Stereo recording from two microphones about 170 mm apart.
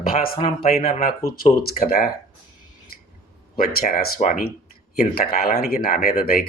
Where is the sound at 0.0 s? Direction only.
60° left (ahead or behind).